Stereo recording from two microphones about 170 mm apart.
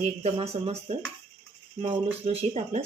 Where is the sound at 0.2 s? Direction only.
35° right (ahead or behind).